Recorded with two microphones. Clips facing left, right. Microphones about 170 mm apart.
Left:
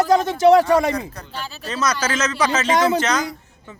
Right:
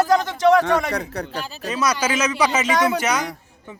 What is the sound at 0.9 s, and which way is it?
Speech, 75° right (ahead or behind).